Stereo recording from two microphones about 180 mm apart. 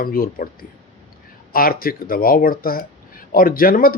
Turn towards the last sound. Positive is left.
turn(degrees=50)  # may be behind; listen again after turning